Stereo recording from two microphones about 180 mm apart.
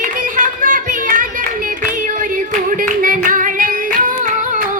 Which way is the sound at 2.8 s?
50° right (ahead or behind).